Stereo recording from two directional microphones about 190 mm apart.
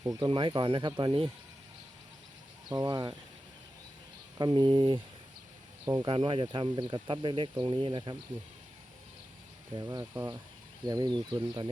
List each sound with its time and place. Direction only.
0.0 s speech: 20° right (ahead or behind)
2.6 s speech: 20° right (ahead or behind)
4.4 s speech: 25° right (ahead or behind)
9.7 s speech: 20° right (ahead or behind)